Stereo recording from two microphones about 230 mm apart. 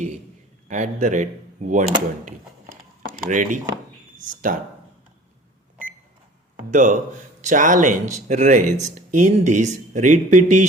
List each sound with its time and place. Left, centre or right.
0.7 s speech: right
3.2 s speech: right
6.7 s speech: right